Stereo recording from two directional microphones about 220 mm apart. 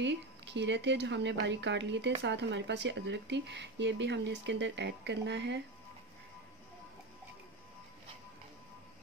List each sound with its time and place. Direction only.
0.0 s speech: 55° right (ahead or behind)